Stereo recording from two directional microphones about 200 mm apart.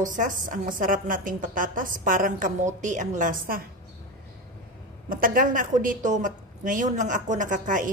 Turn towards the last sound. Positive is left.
turn(degrees=-40)  # may be behind; listen again after turning